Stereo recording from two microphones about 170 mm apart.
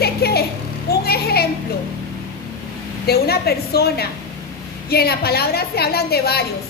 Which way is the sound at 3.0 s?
70° left (ahead or behind).